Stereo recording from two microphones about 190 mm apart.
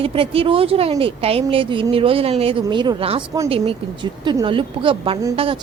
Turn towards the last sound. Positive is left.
turn(degrees=-30)  # may be behind; listen again after turning